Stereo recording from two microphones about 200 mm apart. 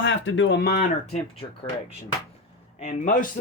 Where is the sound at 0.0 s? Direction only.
65° left (ahead or behind); by 0.9 s 45° left (ahead or behind).